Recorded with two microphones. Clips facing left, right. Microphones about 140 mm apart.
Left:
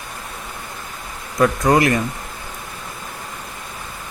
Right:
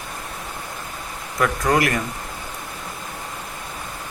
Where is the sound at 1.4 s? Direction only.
25° left (ahead or behind).